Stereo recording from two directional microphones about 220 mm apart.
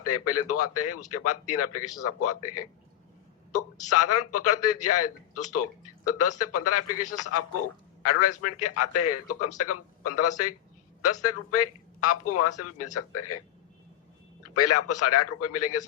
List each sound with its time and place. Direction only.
0.0 s a man's voice: 90° left
14.4 s a man's voice: 90° left